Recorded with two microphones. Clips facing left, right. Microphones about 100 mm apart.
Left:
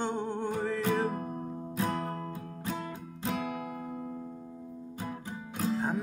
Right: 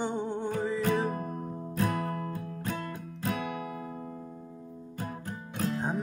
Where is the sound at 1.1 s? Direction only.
45° right (ahead or behind).